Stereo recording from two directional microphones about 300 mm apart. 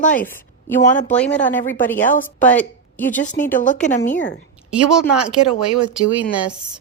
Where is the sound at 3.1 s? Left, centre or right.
Left.